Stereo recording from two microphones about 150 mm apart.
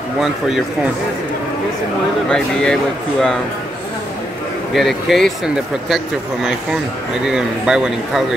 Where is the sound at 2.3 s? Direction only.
5° left (ahead or behind).